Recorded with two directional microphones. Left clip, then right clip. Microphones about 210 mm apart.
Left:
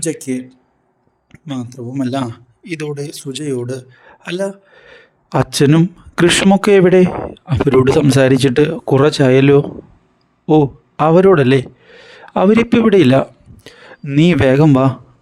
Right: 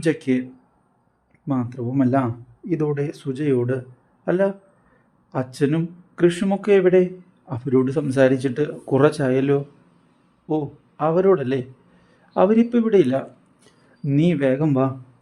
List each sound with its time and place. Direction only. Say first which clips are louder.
0.0 s speech: even; centre (ahead or behind)
1.5 s speech: even; 5° left (ahead or behind)
2.2 s a man's voice: left 2 dB; 40° left (ahead or behind)
2.8 s speech: left 1 dB; 5° left (ahead or behind)
4.2 s a man's voice: right 1 dB; 45° left (ahead or behind)